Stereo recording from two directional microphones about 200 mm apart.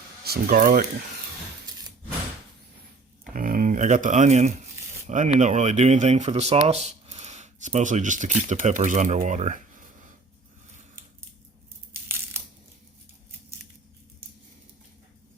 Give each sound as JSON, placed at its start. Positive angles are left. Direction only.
{"t": 0.3, "sound": "speech", "side_deg": -45}
{"t": 3.3, "sound": "speech", "side_deg": -45}